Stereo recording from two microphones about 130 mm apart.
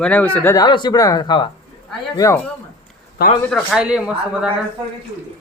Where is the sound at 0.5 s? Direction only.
35° left (ahead or behind).